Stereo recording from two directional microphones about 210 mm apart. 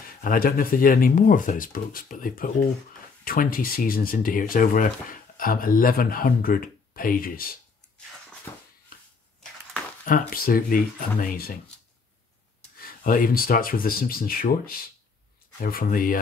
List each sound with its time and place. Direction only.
0.2 s speech: 40° left (ahead or behind)
10.3 s speech: 45° left (ahead or behind)
12.7 s speech: 45° left (ahead or behind)